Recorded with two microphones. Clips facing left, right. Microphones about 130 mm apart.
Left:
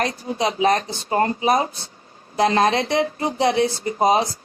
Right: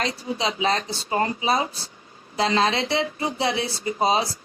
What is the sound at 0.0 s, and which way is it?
Speech, 50° left (ahead or behind).